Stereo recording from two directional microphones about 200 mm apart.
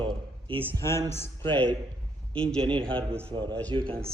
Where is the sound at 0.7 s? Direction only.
15° left (ahead or behind).